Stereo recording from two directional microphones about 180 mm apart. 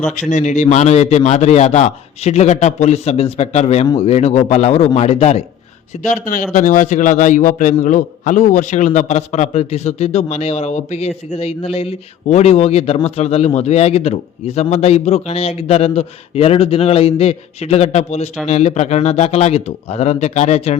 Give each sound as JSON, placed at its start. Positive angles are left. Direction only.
{"t": 0.2, "sound": "a man's voice", "side_deg": 40}